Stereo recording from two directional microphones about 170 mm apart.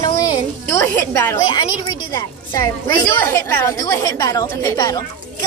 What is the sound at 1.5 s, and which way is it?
A woman's voice, 25° left (ahead or behind).